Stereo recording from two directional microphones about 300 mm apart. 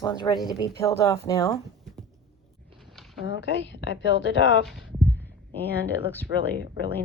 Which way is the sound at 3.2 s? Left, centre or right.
Left.